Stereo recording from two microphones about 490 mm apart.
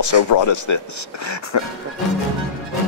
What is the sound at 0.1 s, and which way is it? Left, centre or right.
Speech, left.